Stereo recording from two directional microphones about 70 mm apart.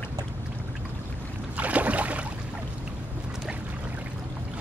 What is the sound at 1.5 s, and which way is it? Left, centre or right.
Boat, right.